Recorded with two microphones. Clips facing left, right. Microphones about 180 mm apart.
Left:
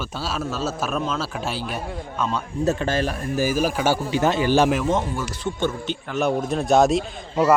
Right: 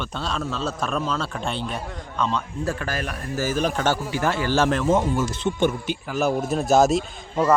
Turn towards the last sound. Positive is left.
turn(degrees=0)  # may be behind; listen again after turning